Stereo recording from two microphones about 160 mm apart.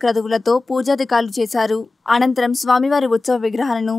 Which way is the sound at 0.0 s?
Centre (ahead or behind).